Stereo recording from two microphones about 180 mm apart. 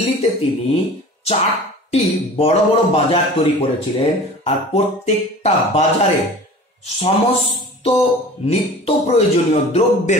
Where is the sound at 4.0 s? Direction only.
35° left (ahead or behind).